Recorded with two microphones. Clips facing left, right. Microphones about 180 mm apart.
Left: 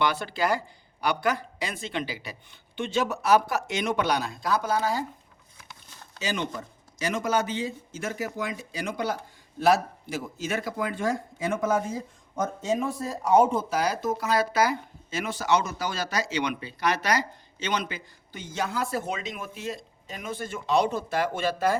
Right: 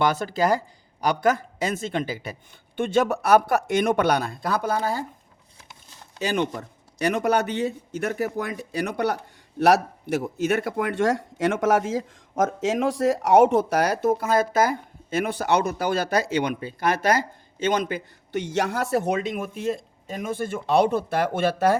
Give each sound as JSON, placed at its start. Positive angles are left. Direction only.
{"t": 0.0, "sound": "speech", "side_deg": -45}
{"t": 6.1, "sound": "a man's voice", "side_deg": -55}
{"t": 18.3, "sound": "speech", "side_deg": -70}